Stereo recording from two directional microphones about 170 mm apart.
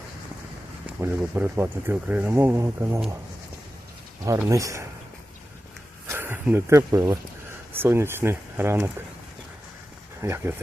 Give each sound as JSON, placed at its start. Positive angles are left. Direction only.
{"t": 0.9, "sound": "speech", "side_deg": -10}
{"t": 4.4, "sound": "speech", "side_deg": -20}
{"t": 6.1, "sound": "speech", "side_deg": -15}
{"t": 10.2, "sound": "speech", "side_deg": -15}